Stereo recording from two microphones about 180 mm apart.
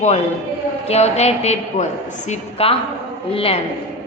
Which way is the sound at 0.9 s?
35° left (ahead or behind).